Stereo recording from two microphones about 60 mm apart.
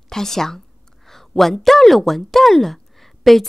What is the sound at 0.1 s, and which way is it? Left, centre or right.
A woman's voice, centre.